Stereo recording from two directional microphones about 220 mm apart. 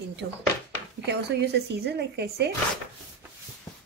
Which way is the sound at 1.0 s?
50° right (ahead or behind).